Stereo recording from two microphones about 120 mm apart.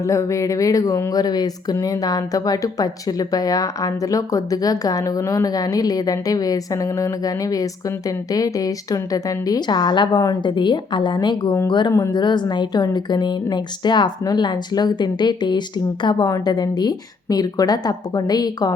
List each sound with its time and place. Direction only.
0.0 s speech: 25° left (ahead or behind)